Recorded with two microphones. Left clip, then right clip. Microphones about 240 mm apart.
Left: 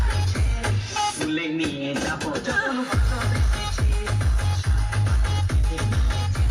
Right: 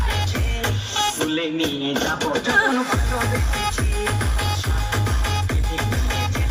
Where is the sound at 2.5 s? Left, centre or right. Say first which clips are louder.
Right 6 dB; right.